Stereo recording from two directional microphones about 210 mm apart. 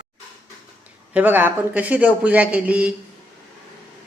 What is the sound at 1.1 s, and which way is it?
Speech, 10° right (ahead or behind).